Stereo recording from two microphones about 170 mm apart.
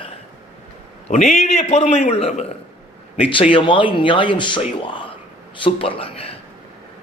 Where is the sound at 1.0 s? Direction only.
40° left (ahead or behind).